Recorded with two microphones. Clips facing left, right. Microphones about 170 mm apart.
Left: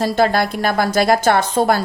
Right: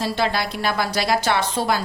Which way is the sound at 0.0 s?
50° left (ahead or behind).